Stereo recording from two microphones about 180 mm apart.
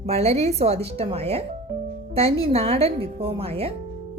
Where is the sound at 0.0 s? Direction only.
35° right (ahead or behind).